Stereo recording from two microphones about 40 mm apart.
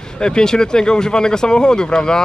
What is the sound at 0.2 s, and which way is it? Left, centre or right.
Speech, centre.